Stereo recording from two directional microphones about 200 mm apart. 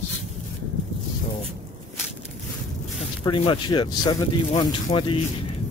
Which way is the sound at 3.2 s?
25° left (ahead or behind).